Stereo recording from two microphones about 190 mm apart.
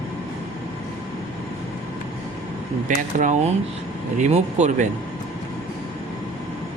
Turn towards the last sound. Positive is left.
turn(degrees=-40)  # may be behind; listen again after turning